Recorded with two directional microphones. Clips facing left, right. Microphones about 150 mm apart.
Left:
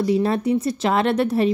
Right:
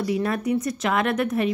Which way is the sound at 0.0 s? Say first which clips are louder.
Left 5 dB; 30° left (ahead or behind).